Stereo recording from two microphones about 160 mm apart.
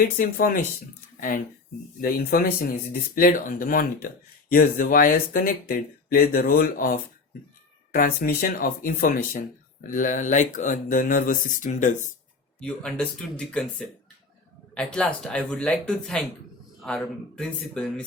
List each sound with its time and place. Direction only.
0.2 s speech: 60° left (ahead or behind)
2.0 s speech: 65° left (ahead or behind)
12.5 s speech: 5° left (ahead or behind)